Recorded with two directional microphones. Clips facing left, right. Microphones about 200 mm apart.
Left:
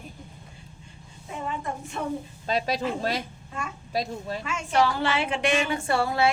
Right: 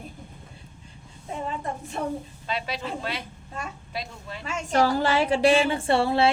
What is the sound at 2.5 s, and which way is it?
A woman's voice, 40° left (ahead or behind).